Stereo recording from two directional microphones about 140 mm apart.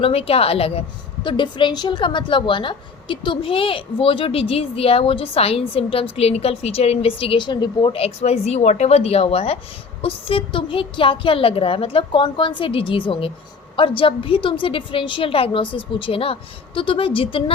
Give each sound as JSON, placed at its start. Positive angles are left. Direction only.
{"t": 0.0, "sound": "a woman's voice", "side_deg": 45}